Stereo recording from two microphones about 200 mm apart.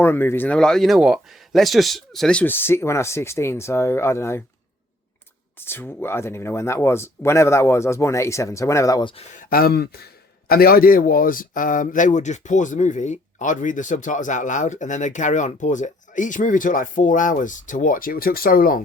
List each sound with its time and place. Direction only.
0.0 s speech: 10° left (ahead or behind)
5.5 s speech: 10° left (ahead or behind)
9.3 s speech: 45° left (ahead or behind)